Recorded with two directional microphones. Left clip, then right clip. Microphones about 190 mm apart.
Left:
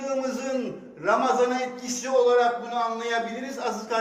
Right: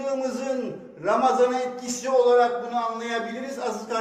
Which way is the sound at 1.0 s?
15° right (ahead or behind).